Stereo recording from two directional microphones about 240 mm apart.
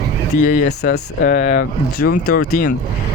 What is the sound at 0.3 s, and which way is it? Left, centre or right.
Speech, left.